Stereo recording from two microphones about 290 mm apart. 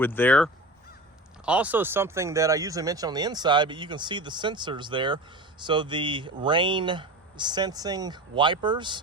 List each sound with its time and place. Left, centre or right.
0.0 s speech: centre